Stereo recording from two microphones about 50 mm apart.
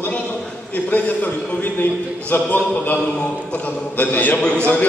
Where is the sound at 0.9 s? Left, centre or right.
Left.